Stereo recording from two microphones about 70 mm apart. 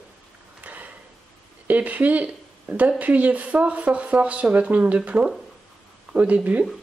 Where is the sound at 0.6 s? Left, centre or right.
Right.